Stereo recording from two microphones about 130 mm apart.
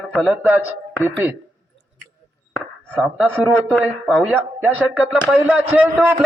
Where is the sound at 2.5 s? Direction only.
10° left (ahead or behind).